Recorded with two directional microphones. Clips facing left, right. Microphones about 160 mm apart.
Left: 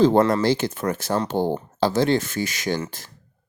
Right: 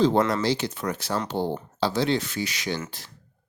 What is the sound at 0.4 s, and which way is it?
Speech, 50° left (ahead or behind).